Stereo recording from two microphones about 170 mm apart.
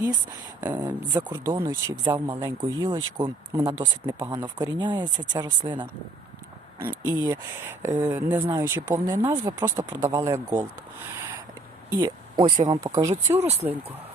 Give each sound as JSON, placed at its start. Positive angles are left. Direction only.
{"t": 0.6, "sound": "speech", "side_deg": -20}
{"t": 7.0, "sound": "speech", "side_deg": -15}
{"t": 11.9, "sound": "speech", "side_deg": -20}